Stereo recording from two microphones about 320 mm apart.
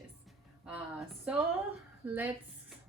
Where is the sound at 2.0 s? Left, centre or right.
Centre.